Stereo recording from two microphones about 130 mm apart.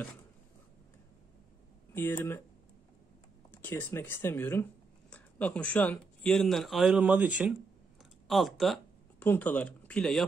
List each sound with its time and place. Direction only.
2.0 s speech: 20° left (ahead or behind)
3.6 s speech: 15° left (ahead or behind); by 8.8 s centre (ahead or behind)
9.2 s speech: 15° left (ahead or behind)